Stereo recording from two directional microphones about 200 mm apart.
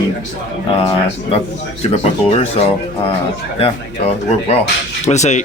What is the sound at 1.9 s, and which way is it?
Speech, 30° left (ahead or behind).